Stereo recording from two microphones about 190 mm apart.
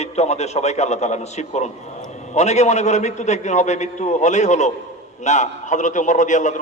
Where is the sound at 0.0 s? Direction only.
35° left (ahead or behind).